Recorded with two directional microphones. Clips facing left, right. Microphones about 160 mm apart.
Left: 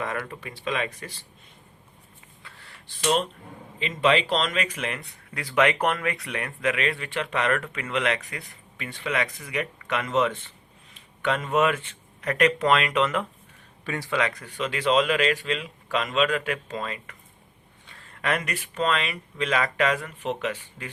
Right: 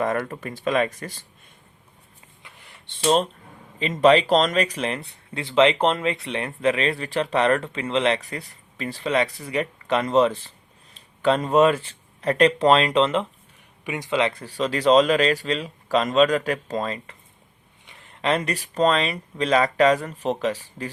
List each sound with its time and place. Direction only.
0.0 s speech: 45° right (ahead or behind)
2.4 s a sound: 15° right (ahead or behind)
3.8 s speech: 40° right (ahead or behind)
13.8 s speech: 20° right (ahead or behind); by 17.2 s 35° right (ahead or behind)
17.8 s speech: 20° right (ahead or behind); by 20.9 s 35° right (ahead or behind)